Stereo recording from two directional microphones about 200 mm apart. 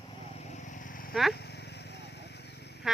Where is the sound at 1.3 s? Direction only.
55° left (ahead or behind).